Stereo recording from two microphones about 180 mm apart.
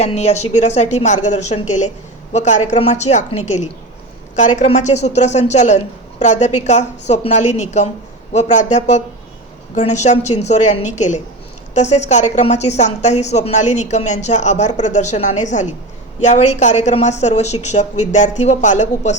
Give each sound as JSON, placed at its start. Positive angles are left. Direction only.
{"t": 0.0, "sound": "a woman's voice", "side_deg": 35}